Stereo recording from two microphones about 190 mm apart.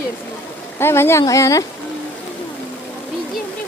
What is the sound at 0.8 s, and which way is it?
Speech, 15° left (ahead or behind).